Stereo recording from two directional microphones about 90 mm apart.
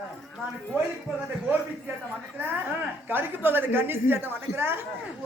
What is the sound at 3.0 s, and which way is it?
A woman's voice, 25° right (ahead or behind).